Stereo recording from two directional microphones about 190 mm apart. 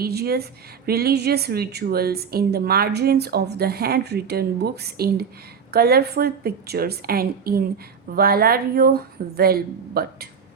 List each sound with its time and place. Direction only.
0.0 s a woman's voice: 55° right (ahead or behind)